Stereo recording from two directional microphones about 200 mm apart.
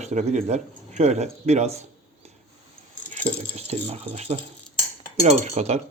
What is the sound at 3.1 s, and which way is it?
Speech, 35° right (ahead or behind).